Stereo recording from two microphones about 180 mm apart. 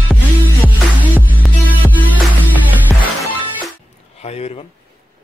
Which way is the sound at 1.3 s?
10° left (ahead or behind).